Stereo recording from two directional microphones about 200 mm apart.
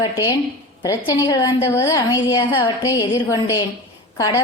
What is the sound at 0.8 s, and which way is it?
A woman's voice, 20° left (ahead or behind).